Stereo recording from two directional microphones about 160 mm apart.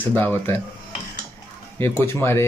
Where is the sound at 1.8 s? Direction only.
15° left (ahead or behind).